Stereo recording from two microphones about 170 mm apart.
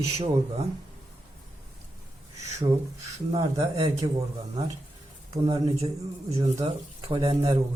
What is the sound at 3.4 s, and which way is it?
Speech, 20° right (ahead or behind).